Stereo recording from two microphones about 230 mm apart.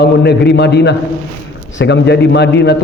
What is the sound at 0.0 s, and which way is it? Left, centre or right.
A man's voice, left.